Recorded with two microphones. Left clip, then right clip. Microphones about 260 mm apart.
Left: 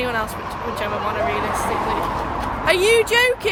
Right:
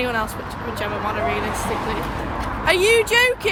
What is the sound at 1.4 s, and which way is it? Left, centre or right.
Speech, left.